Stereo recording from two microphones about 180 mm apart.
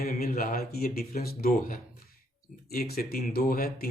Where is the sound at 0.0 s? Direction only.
55° left (ahead or behind).